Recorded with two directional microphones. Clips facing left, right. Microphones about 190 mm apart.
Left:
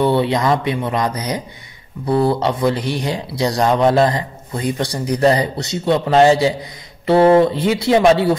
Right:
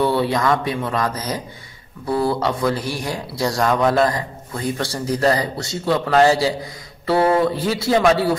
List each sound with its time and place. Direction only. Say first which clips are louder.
0.0 s speech: left 3 dB; 20° left (ahead or behind)